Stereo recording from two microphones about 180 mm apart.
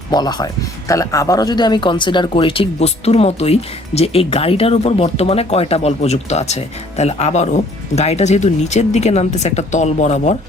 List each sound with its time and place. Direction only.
0.1 s speech: 20° left (ahead or behind); by 10.3 s 40° left (ahead or behind)